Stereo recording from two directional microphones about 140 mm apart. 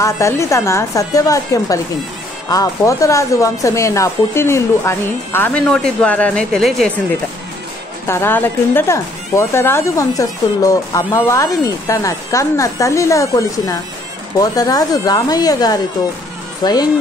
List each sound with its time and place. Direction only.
0.0 s speech: 20° left (ahead or behind); by 6.9 s 5° left (ahead or behind)
8.1 s speech: 15° left (ahead or behind)